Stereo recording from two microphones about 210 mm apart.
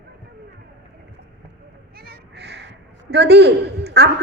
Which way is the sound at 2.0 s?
50° right (ahead or behind).